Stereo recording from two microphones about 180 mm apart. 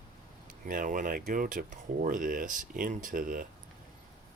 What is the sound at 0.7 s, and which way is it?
Speech, 50° right (ahead or behind).